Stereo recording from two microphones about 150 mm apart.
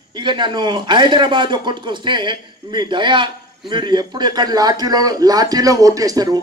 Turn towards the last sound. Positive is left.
turn(degrees=-25)  # may be behind; listen again after turning